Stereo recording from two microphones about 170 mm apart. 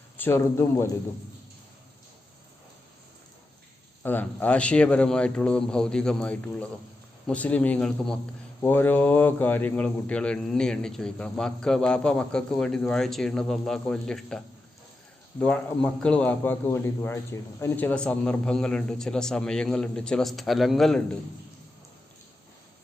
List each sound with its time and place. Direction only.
0.2 s a man's voice: 15° left (ahead or behind)
4.0 s a man's voice: 10° left (ahead or behind)